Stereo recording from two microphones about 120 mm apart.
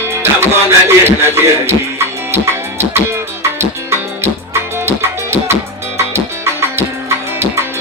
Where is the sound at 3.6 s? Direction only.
20° right (ahead or behind).